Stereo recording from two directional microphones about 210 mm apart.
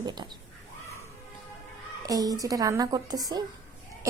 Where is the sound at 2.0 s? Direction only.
15° right (ahead or behind).